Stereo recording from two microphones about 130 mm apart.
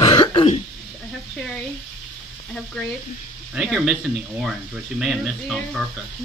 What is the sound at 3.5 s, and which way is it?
Speech, centre (ahead or behind).